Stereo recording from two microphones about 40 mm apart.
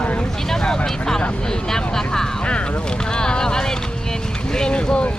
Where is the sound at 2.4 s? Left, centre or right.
Left.